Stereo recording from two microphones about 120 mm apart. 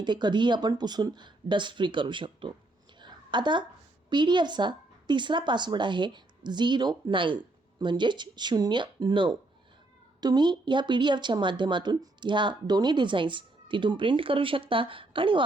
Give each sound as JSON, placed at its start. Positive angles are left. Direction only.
{"t": 0.0, "sound": "speech", "side_deg": -40}
{"t": 3.0, "sound": "a sound", "side_deg": -40}
{"t": 4.1, "sound": "speech", "side_deg": -40}